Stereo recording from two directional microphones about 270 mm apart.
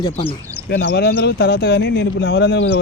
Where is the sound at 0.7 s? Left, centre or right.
Left.